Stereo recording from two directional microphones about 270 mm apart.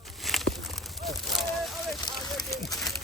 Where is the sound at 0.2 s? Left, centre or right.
Centre.